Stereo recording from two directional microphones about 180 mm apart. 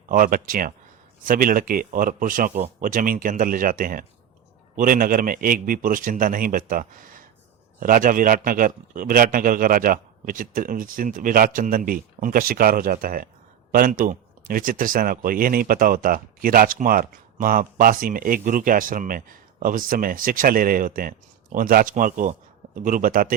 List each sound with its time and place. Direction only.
0.1 s speech: 50° right (ahead or behind)